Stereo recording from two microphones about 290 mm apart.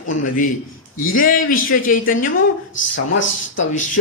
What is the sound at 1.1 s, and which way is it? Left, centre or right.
Speech, left.